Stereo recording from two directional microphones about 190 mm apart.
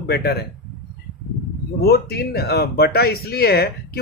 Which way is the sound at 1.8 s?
55° left (ahead or behind).